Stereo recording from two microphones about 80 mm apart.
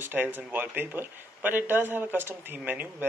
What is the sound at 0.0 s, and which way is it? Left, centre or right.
Speech, right.